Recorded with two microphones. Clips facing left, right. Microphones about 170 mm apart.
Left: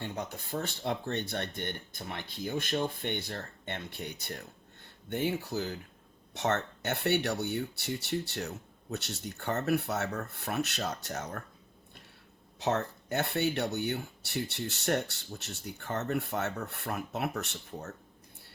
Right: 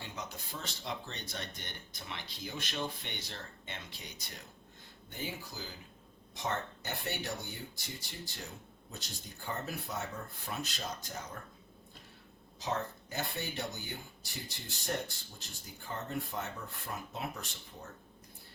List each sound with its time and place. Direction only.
0.0 s speech: 55° left (ahead or behind); by 11.4 s 70° left (ahead or behind)
12.5 s speech: 70° left (ahead or behind)